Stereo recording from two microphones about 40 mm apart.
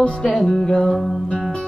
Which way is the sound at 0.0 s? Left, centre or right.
Left.